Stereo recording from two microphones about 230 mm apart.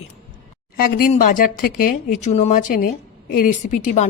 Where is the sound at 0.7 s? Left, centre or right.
Left.